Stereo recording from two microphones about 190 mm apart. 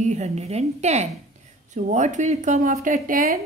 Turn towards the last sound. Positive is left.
turn(degrees=-45)  # may be behind; listen again after turning